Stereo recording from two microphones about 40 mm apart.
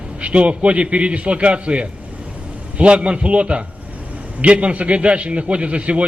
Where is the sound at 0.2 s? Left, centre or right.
Right.